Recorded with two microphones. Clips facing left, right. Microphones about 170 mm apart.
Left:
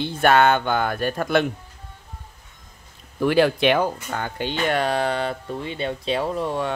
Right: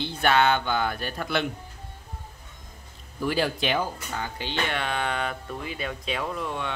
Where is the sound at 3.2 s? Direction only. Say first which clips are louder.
Left 8 dB; 65° left (ahead or behind).